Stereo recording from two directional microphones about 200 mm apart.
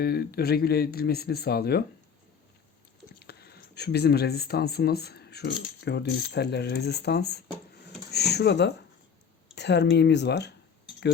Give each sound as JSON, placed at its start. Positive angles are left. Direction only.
{"t": 0.0, "sound": "speech", "side_deg": 50}
{"t": 3.2, "sound": "speech", "side_deg": 55}